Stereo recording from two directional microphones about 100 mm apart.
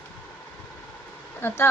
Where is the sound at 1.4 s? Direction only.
25° left (ahead or behind).